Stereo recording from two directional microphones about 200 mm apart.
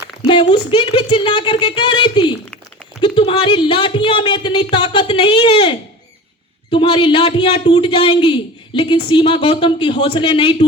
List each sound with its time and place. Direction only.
0.3 s a man's voice: 25° left (ahead or behind)